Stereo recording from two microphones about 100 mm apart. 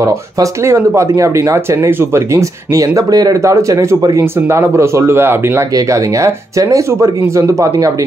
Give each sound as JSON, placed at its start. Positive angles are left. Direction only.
{"t": 0.0, "sound": "speech", "side_deg": -30}